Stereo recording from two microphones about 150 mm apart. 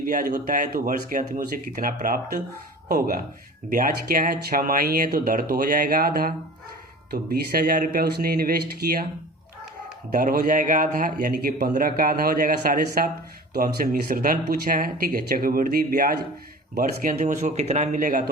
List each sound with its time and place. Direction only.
0.0 s a man's voice: 65° right (ahead or behind)
3.7 s a man's voice: 70° right (ahead or behind)
10.1 s a man's voice: 65° right (ahead or behind)
13.5 s a man's voice: 90° right; by 18.3 s 60° right (ahead or behind)